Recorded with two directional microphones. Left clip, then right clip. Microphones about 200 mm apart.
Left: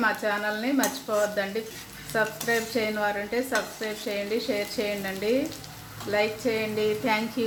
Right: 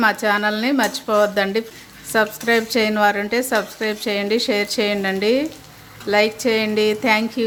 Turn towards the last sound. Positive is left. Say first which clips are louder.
# right 8 dB
turn(degrees=-35)  # may be behind; listen again after turning